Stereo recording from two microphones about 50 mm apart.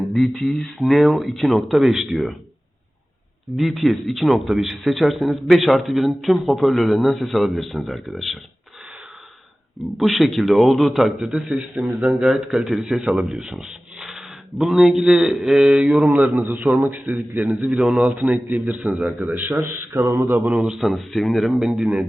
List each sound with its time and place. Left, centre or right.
0.1 s a man's voice: centre
3.6 s a man's voice: centre
10.0 s a man's voice: centre
11.2 s speech: centre
12.6 s a man's voice: centre
16.0 s a man's voice: right
19.6 s mantra: right
20.4 s a man's voice: right
20.7 s a man's voice: centre
21.6 s speech: centre